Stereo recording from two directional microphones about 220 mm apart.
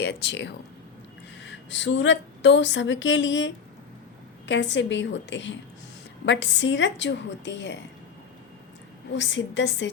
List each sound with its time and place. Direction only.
0.0 s a woman's voice: 50° left (ahead or behind)
9.1 s a woman's voice: 55° left (ahead or behind)